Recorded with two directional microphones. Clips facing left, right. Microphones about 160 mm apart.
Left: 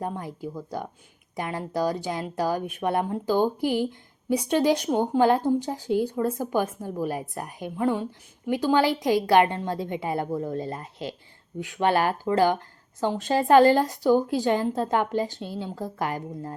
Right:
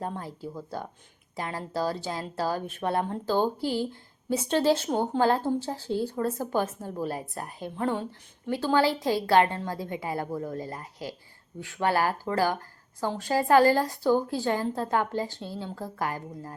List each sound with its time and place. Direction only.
0.0 s speech: 15° left (ahead or behind)